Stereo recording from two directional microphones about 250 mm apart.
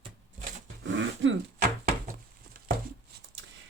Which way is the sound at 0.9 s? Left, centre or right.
Right.